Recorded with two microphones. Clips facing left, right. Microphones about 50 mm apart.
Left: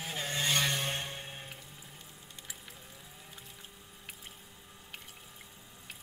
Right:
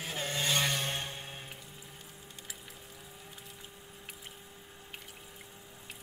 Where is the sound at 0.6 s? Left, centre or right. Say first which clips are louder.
Even; centre.